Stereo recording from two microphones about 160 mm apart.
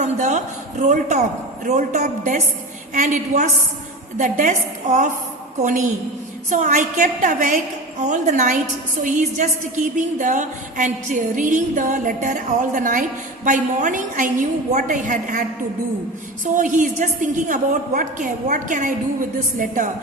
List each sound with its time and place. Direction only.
0.0 s a woman's voice: 50° right (ahead or behind)
16.6 s a woman's voice: 55° right (ahead or behind)